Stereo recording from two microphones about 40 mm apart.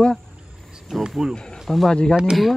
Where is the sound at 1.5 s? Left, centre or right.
Centre.